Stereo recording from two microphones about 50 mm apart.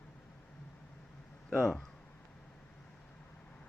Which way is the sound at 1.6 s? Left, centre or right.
Centre.